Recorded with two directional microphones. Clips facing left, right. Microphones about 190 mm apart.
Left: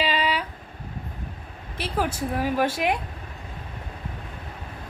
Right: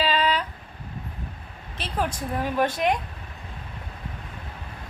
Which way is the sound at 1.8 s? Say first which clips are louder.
Left 2 dB; 10° left (ahead or behind).